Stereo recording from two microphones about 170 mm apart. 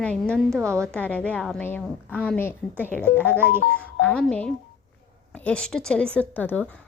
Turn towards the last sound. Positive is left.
turn(degrees=10)  # may be behind; listen again after turning